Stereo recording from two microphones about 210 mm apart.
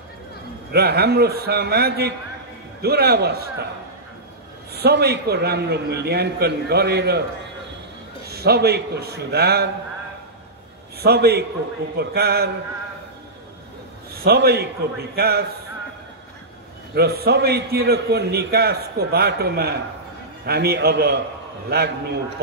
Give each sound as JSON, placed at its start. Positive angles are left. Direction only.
{"t": 0.7, "sound": "a man's voice", "side_deg": -50}
{"t": 4.7, "sound": "a man's voice", "side_deg": -50}
{"t": 8.3, "sound": "a man's voice", "side_deg": -50}
{"t": 11.0, "sound": "a man's voice", "side_deg": -50}
{"t": 14.2, "sound": "a man's voice", "side_deg": -50}
{"t": 16.9, "sound": "a man's voice", "side_deg": -50}